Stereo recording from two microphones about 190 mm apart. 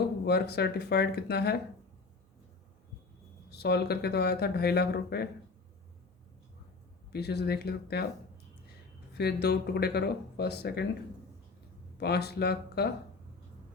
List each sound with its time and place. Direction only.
0.3 s speech: 60° left (ahead or behind)
3.5 s speech: 60° left (ahead or behind)
7.1 s speech: 60° left (ahead or behind)
9.1 s speech: 60° left (ahead or behind)
11.9 s speech: 60° left (ahead or behind)